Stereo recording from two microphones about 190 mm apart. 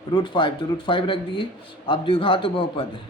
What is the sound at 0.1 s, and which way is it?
Speech, 25° left (ahead or behind).